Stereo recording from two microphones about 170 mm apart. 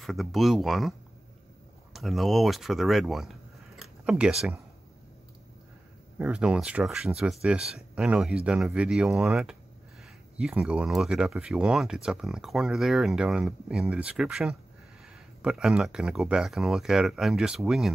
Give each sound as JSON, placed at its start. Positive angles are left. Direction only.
{"t": 0.0, "sound": "speech", "side_deg": 0}
{"t": 2.0, "sound": "speech", "side_deg": 0}
{"t": 6.1, "sound": "speech", "side_deg": -5}